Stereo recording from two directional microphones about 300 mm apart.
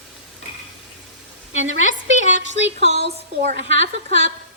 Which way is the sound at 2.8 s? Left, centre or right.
Right.